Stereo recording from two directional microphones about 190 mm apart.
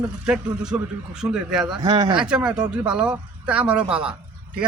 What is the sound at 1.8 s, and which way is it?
Speech, 20° right (ahead or behind).